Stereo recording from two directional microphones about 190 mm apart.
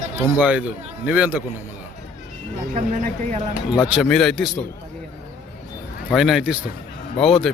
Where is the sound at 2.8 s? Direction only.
35° right (ahead or behind).